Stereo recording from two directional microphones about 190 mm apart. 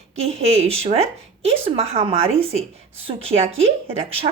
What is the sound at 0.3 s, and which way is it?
A woman's voice, 30° right (ahead or behind).